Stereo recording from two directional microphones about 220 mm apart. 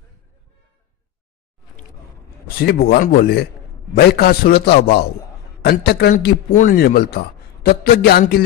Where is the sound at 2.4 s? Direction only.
45° left (ahead or behind).